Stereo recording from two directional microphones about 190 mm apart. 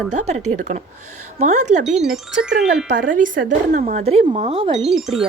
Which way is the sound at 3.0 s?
45° right (ahead or behind).